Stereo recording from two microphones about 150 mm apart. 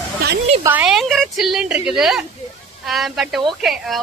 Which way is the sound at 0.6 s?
10° right (ahead or behind).